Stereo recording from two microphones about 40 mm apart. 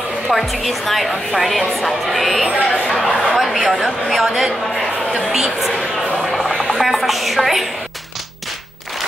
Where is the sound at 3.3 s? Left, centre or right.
Centre.